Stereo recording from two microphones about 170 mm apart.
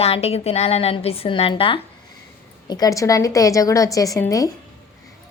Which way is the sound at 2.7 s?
20° left (ahead or behind).